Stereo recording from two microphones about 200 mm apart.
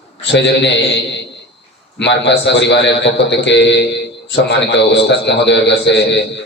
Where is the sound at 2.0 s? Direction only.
60° left (ahead or behind).